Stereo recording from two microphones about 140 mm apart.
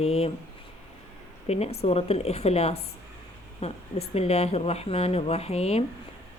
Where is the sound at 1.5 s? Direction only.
50° left (ahead or behind).